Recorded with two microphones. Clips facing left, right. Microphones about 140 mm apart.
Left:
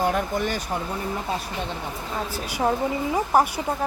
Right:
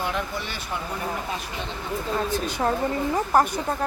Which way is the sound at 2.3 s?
10° left (ahead or behind).